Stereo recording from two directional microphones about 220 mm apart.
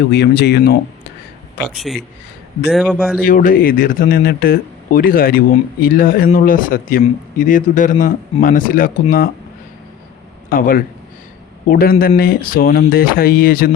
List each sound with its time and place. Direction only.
0.1 s speech: 50° left (ahead or behind)
1.6 s a man's voice: centre (ahead or behind)
3.2 s speech: 40° left (ahead or behind)
10.5 s speech: 40° left (ahead or behind)